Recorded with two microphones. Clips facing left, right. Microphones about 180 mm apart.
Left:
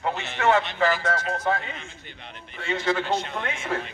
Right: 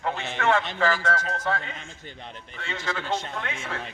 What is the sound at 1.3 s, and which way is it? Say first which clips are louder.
Speech: left 3 dB; 20° left (ahead or behind).